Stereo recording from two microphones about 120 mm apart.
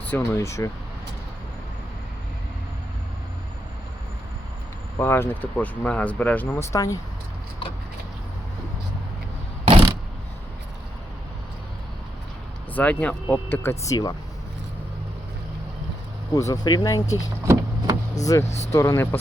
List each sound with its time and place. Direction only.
0.2 s speech: 25° left (ahead or behind)
4.9 s speech: 20° left (ahead or behind)
6.7 s speech: 30° left (ahead or behind)
9.6 s a sound: 45° right (ahead or behind)
12.7 s speech: 10° left (ahead or behind); by 14.1 s 30° left (ahead or behind)
16.3 s speech: 30° left (ahead or behind)
17.4 s a sound: 25° right (ahead or behind)
18.3 s speech: 35° left (ahead or behind)